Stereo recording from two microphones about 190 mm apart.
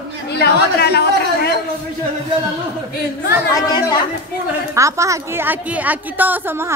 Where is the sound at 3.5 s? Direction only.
20° left (ahead or behind).